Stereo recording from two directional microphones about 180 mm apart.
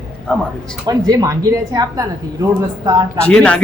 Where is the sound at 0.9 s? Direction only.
20° right (ahead or behind).